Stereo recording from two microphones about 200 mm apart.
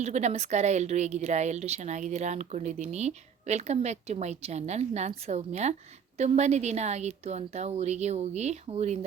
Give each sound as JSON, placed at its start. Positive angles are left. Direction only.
{"t": 0.0, "sound": "speech", "side_deg": -35}